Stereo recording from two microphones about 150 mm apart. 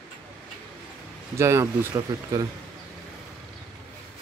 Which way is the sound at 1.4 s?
20° right (ahead or behind).